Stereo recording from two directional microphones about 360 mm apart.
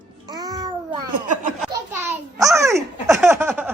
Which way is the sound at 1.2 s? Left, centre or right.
Right.